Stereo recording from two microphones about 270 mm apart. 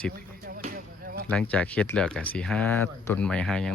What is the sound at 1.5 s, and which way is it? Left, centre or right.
Speech, centre.